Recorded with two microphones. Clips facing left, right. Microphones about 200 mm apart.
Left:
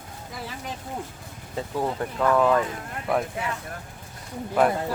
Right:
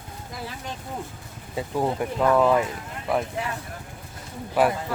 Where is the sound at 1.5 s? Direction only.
15° right (ahead or behind).